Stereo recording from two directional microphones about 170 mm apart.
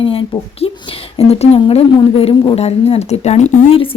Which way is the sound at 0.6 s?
35° left (ahead or behind).